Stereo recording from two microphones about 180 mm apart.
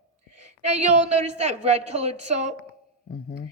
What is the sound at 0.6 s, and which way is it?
A woman's voice, 40° right (ahead or behind).